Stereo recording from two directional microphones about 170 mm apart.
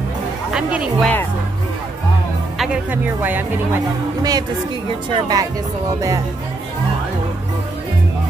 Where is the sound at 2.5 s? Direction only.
5° right (ahead or behind).